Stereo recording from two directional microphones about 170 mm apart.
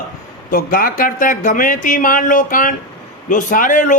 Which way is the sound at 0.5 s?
55° left (ahead or behind).